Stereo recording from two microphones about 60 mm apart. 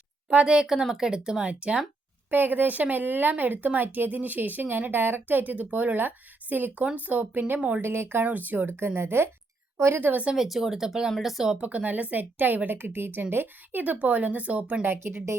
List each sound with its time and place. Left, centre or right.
0.4 s speech: centre
2.3 s speech: right
8.2 s speech: right
10.3 s speech: centre
11.5 s speech: right
15.0 s speech: right